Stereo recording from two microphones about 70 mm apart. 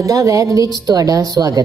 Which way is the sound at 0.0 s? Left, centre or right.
Right.